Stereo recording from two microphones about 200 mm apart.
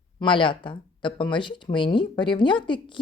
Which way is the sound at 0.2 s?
25° left (ahead or behind).